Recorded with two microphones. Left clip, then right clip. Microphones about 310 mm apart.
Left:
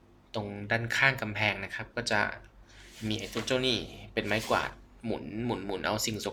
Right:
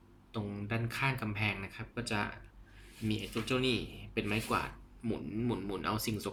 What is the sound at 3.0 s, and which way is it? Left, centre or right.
Speech, left.